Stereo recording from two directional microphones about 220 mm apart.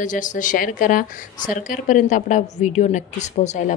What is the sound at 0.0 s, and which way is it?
Speech, 35° left (ahead or behind).